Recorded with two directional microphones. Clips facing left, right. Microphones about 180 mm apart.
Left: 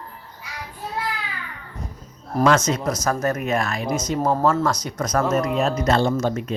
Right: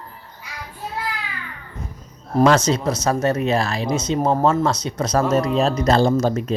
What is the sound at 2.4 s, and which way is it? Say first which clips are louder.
Speech: right 3 dB; 30° right (ahead or behind).